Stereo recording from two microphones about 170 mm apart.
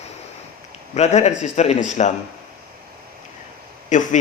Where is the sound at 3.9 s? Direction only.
50° left (ahead or behind).